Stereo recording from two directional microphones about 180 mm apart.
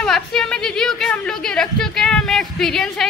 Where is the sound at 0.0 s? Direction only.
Centre (ahead or behind).